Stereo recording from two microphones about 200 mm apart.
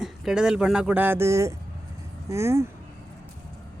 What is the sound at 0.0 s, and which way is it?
A man's voice, 5° right (ahead or behind).